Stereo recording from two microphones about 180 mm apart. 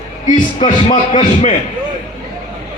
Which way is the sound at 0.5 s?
30° left (ahead or behind).